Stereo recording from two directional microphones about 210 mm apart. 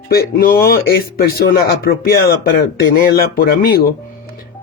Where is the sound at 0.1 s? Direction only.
45° left (ahead or behind).